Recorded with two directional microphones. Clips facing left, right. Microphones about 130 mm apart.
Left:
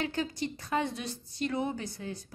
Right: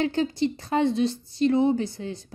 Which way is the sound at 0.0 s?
30° right (ahead or behind).